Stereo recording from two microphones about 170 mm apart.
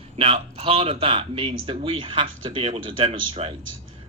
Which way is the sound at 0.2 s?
35° right (ahead or behind).